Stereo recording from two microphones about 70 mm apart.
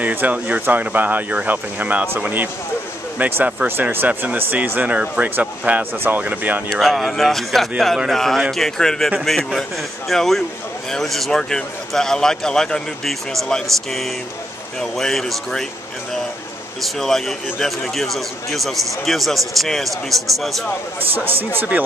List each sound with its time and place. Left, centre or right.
0.0 s speech: right
6.7 s speech: centre
16.8 s speech: centre
21.1 s speech: right